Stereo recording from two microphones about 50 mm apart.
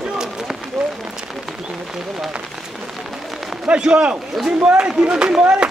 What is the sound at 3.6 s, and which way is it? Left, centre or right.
A man's voice, right.